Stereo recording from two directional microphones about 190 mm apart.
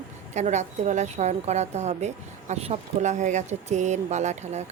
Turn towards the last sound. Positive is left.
turn(degrees=-35)  # may be behind; listen again after turning